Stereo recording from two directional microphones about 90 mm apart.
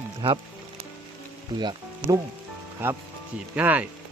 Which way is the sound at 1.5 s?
50° right (ahead or behind).